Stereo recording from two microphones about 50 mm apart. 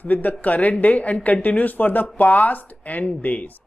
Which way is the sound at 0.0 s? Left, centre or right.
Left.